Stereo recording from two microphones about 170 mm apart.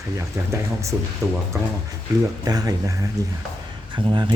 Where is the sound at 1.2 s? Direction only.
20° right (ahead or behind).